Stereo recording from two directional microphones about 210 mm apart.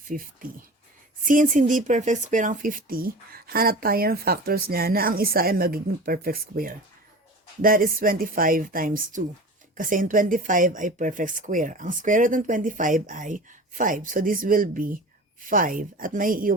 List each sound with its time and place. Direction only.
0.1 s speech: 40° right (ahead or behind)